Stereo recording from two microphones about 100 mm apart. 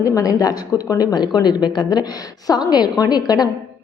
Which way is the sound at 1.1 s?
45° left (ahead or behind).